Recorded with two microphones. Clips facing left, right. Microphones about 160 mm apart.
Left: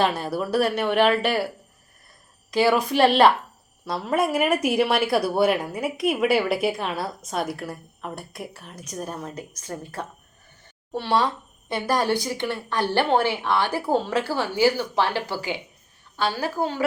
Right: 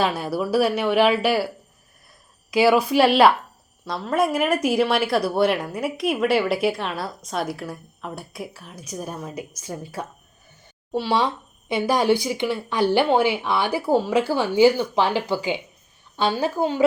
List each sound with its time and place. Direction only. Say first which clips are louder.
0.0 s speech: right 1 dB; 5° right (ahead or behind)
2.5 s a woman's voice: right 3 dB; 5° right (ahead or behind)